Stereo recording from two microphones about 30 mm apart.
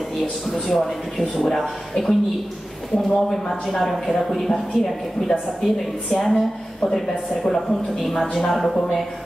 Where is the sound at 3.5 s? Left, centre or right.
Centre.